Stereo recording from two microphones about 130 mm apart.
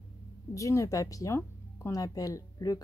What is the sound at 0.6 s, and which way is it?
Speech, 25° left (ahead or behind).